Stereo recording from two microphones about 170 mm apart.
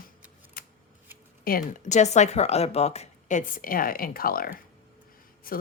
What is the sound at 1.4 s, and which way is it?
Speech, 55° left (ahead or behind).